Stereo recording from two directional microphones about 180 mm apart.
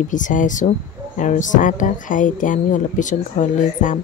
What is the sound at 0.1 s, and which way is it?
Speech, 45° left (ahead or behind).